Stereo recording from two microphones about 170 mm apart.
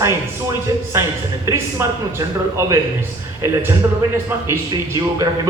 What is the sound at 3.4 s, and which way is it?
Speech, 15° right (ahead or behind).